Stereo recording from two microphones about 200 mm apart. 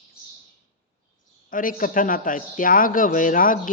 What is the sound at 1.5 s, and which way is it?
A man's voice, 45° left (ahead or behind).